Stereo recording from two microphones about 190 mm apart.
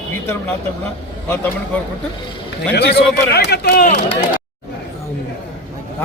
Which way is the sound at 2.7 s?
60° left (ahead or behind).